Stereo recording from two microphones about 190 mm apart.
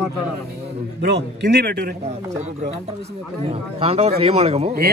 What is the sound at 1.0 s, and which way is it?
Speech, 65° right (ahead or behind).